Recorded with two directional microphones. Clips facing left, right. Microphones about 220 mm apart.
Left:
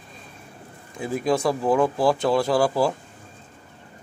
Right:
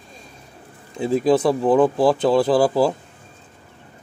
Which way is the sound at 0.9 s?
25° right (ahead or behind).